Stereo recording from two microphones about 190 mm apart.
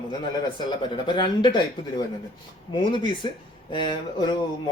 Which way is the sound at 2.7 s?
25° left (ahead or behind).